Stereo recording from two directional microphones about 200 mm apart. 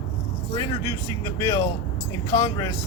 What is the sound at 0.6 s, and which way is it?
Speech, 15° left (ahead or behind).